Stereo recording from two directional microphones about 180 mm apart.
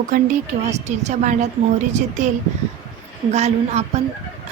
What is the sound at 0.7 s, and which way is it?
Speech, 40° right (ahead or behind).